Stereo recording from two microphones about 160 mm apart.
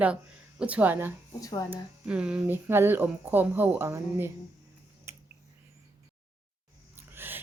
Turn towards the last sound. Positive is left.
turn(degrees=-15)  # may be behind; listen again after turning